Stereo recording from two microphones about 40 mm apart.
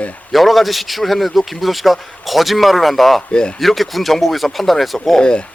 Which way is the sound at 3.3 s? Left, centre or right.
Left.